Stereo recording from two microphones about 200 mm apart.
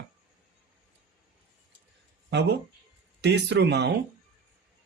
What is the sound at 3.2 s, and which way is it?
Speech, 60° right (ahead or behind).